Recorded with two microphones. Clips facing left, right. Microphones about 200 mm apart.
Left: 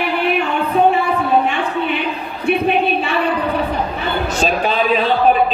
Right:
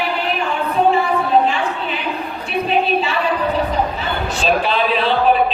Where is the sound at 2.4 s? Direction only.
60° left (ahead or behind).